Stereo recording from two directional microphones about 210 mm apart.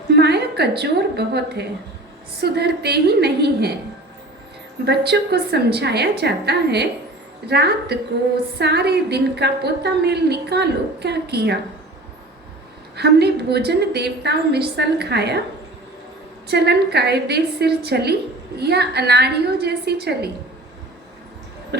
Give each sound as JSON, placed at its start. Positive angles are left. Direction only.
{"t": 0.1, "sound": "a sound", "side_deg": -50}
{"t": 2.4, "sound": "a woman's voice", "side_deg": -50}
{"t": 4.9, "sound": "a woman's voice", "side_deg": -50}
{"t": 13.0, "sound": "a woman's voice", "side_deg": -50}
{"t": 16.5, "sound": "a woman's voice", "side_deg": -50}